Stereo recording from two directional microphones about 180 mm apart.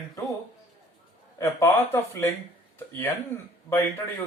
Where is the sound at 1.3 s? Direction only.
15° left (ahead or behind).